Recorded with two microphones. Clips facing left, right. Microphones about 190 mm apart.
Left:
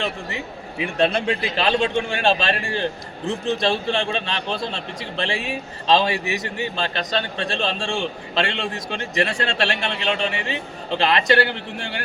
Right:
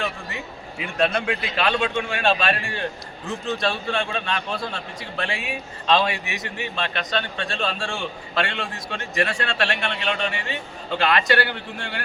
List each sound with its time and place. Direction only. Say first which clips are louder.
0.9 s a man's voice: left 2 dB; 25° left (ahead or behind)